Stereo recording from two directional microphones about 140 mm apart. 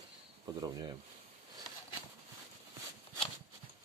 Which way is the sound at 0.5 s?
30° right (ahead or behind).